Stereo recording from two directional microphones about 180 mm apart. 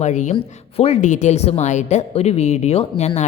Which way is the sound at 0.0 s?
40° left (ahead or behind).